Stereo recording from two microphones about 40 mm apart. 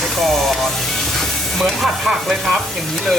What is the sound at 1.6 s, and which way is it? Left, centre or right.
Music, centre.